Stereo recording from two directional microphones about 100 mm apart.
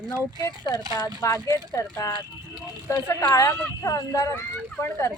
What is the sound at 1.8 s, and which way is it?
Speech, 30° left (ahead or behind).